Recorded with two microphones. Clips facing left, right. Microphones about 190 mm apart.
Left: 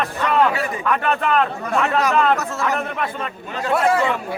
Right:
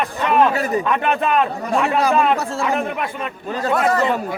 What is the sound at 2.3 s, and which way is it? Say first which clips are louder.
Speech: right 1 dB; 30° right (ahead or behind).